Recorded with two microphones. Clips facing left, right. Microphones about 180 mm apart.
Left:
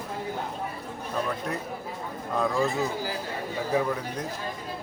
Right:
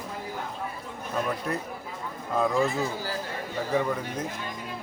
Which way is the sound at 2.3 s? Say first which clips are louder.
Right 1 dB; centre (ahead or behind).